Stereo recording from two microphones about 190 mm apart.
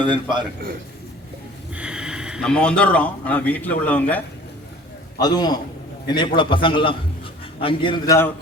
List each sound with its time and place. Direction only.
0.0 s a man's voice: 25° right (ahead or behind)
1.7 s speech: 5° right (ahead or behind)
5.2 s a man's voice: 20° left (ahead or behind)